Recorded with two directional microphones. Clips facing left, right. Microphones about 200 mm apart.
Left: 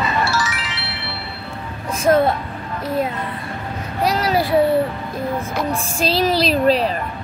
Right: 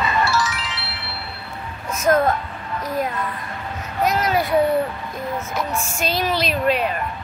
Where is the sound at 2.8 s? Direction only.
30° left (ahead or behind).